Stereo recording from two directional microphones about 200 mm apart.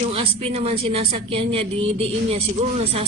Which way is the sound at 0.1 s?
30° right (ahead or behind).